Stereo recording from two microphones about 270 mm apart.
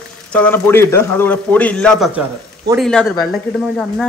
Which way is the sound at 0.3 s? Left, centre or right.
Centre.